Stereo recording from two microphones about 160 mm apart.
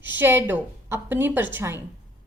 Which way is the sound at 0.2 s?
10° right (ahead or behind).